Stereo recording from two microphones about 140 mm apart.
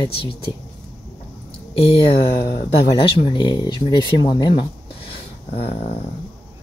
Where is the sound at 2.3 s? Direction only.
90° left.